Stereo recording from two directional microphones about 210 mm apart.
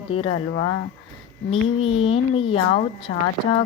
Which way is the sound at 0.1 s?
25° left (ahead or behind).